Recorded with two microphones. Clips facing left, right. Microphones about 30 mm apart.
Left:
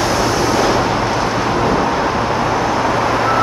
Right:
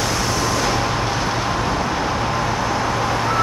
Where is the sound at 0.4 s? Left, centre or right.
Centre.